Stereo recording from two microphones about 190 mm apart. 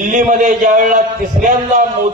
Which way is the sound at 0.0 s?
40° right (ahead or behind).